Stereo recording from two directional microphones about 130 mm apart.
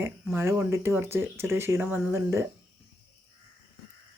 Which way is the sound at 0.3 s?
20° right (ahead or behind).